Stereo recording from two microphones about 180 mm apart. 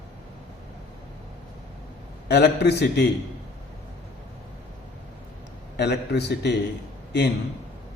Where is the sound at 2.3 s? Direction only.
65° left (ahead or behind).